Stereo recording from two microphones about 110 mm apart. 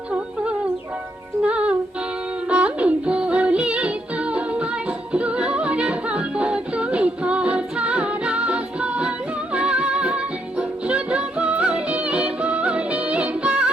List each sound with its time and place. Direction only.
1.5 s music: 10° right (ahead or behind)